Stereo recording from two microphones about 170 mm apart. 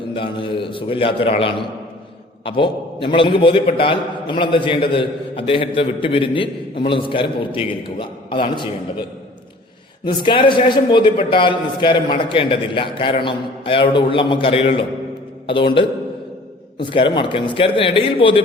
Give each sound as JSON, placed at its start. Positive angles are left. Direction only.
{"t": 0.1, "sound": "a man's voice", "side_deg": 30}
{"t": 10.0, "sound": "a man's voice", "side_deg": 30}